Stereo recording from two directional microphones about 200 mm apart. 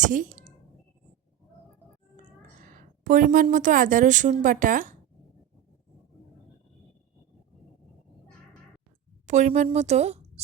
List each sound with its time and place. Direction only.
0.0 s speech: 40° right (ahead or behind)
2.6 s a woman's voice: 40° right (ahead or behind)
9.2 s a woman's voice: 35° right (ahead or behind)